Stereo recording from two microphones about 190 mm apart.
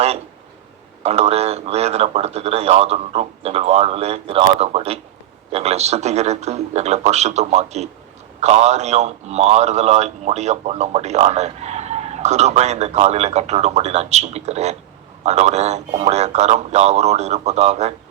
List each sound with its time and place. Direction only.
1.0 s a man's voice: 35° right (ahead or behind)